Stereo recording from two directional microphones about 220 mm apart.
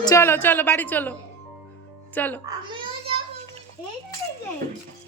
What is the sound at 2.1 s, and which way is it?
Speech, 10° left (ahead or behind).